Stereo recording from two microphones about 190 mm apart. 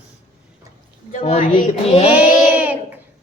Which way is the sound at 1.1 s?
35° left (ahead or behind).